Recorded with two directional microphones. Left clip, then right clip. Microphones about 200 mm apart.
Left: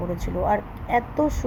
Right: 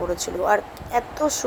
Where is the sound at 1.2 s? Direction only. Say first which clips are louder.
Right 1 dB; 25° right (ahead or behind).